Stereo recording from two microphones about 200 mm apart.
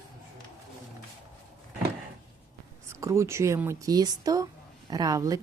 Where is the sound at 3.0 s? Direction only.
15° right (ahead or behind).